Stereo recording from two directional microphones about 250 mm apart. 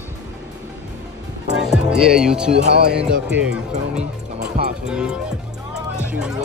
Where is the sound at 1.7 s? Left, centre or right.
Centre.